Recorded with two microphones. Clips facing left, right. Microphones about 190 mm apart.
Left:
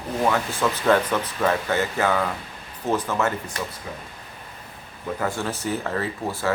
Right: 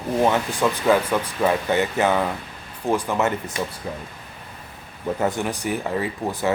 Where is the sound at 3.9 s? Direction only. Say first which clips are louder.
Right 5 dB; 35° right (ahead or behind).